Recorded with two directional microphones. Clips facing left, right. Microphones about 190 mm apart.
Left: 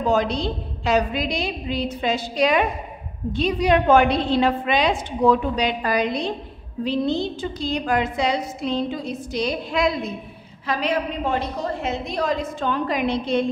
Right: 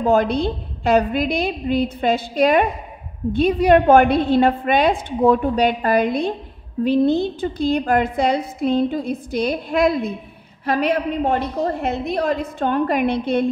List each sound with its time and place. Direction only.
0.0 s a woman's voice: 55° right (ahead or behind)